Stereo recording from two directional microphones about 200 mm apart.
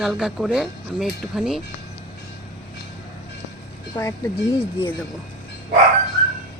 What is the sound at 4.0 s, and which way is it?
Speech, 15° left (ahead or behind).